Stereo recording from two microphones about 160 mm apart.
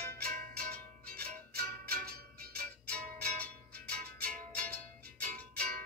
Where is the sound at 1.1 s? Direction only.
70° right (ahead or behind).